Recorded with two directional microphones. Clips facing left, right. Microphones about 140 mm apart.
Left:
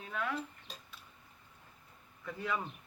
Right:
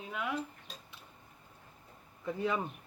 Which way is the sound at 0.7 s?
Centre (ahead or behind).